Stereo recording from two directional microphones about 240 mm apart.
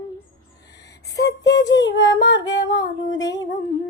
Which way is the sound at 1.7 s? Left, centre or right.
Left.